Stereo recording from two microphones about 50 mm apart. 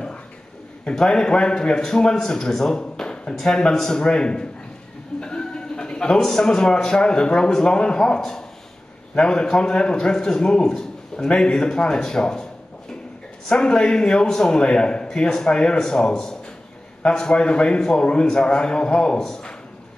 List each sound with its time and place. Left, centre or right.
0.8 s a man's voice: centre
13.5 s a man's voice: centre